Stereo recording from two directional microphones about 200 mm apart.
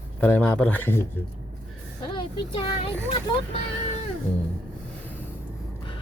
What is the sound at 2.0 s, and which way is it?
Speech, 25° left (ahead or behind).